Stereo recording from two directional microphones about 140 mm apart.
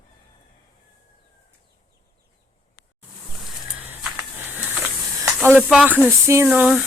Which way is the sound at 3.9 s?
10° right (ahead or behind).